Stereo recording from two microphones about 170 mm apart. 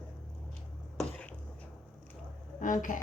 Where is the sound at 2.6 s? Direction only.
50° left (ahead or behind).